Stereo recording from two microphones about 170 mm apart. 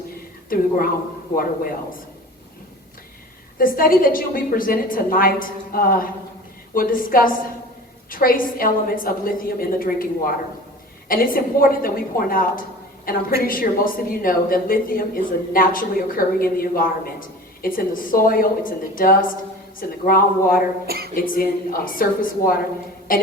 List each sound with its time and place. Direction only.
3.6 s a woman's voice: 55° left (ahead or behind)
20.8 s a sound: 65° right (ahead or behind)
21.2 s a woman's voice: 55° left (ahead or behind)